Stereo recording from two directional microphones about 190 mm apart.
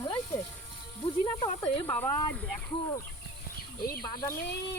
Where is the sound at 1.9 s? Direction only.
5° left (ahead or behind).